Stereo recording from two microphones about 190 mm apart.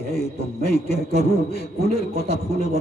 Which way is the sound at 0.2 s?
55° left (ahead or behind).